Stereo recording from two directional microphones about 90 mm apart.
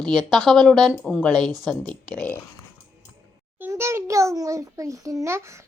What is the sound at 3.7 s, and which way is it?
A child's voice, 30° right (ahead or behind).